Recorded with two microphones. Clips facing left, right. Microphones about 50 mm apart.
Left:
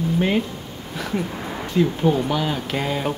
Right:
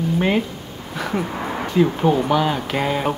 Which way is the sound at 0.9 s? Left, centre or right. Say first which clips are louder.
Right 2 dB; centre.